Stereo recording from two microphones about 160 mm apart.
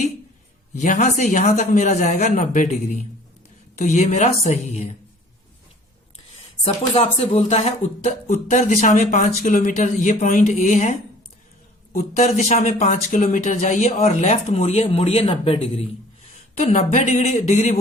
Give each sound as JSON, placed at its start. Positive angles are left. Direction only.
{"t": 0.8, "sound": "speech", "side_deg": 50}
{"t": 6.7, "sound": "speech", "side_deg": 40}
{"t": 12.2, "sound": "speech", "side_deg": 45}